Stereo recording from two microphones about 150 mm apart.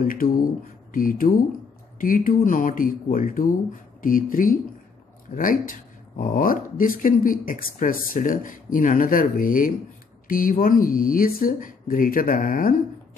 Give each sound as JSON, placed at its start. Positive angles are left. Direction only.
{"t": 0.0, "sound": "speech", "side_deg": 70}